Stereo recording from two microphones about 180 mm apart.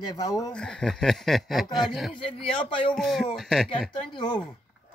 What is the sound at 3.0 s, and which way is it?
Speech, centre (ahead or behind).